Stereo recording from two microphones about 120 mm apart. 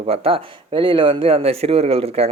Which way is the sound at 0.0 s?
55° right (ahead or behind).